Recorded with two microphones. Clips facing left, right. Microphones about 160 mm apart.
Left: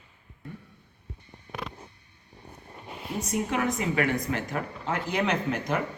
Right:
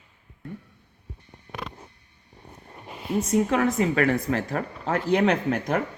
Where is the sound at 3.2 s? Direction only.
25° right (ahead or behind).